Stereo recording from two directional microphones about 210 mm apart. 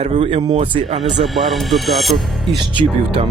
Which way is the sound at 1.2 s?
Centre (ahead or behind).